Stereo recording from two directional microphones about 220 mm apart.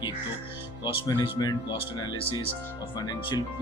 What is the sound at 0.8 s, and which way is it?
Speech, 20° left (ahead or behind).